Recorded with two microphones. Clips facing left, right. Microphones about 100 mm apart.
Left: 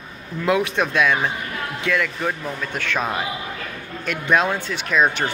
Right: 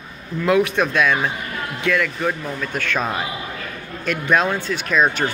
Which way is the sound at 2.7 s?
20° left (ahead or behind).